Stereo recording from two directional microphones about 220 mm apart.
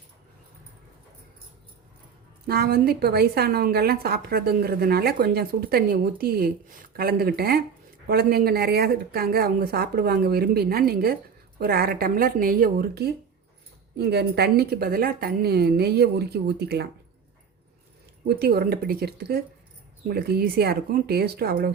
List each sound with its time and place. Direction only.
2.5 s a woman's voice: 45° right (ahead or behind)
18.3 s a woman's voice: 45° right (ahead or behind)